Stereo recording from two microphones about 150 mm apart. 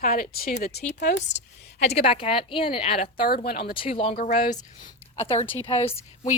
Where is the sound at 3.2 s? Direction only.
85° left.